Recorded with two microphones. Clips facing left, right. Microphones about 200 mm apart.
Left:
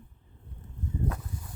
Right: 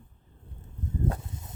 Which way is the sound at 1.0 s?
25° right (ahead or behind).